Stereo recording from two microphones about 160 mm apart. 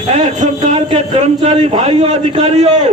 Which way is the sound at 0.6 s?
40° right (ahead or behind).